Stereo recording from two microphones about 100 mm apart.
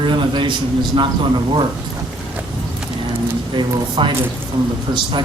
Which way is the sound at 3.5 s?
50° right (ahead or behind).